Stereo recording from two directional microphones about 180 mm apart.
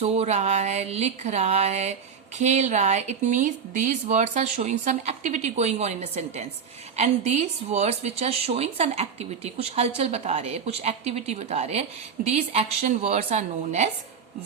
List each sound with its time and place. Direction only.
0.0 s speech: 35° right (ahead or behind)